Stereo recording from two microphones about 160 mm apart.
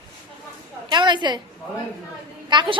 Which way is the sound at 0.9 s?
30° right (ahead or behind).